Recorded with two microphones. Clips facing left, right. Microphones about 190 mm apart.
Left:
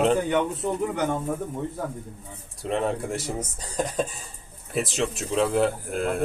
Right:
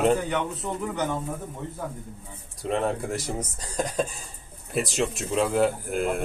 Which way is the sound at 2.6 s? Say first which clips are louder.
Even; centre (ahead or behind).